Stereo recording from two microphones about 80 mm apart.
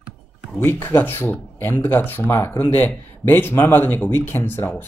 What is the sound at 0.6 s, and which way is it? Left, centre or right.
Speech, left.